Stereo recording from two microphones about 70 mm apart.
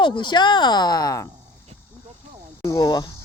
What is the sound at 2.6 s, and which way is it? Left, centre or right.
Speech, left.